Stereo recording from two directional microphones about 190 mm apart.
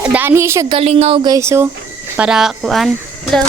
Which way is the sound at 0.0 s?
10° right (ahead or behind).